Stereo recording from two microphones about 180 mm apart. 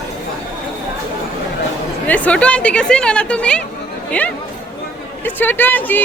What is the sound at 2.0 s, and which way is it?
Speech, 10° left (ahead or behind).